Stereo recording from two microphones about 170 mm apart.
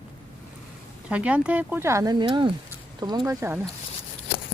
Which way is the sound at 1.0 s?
5° right (ahead or behind).